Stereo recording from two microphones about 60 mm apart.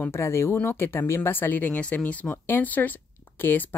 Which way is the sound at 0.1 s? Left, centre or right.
Left.